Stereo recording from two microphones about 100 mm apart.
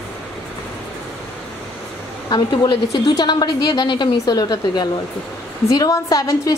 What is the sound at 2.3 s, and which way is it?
A woman's voice, 45° left (ahead or behind).